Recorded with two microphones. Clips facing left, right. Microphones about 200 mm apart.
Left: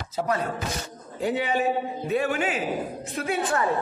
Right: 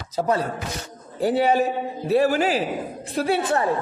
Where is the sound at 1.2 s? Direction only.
40° right (ahead or behind).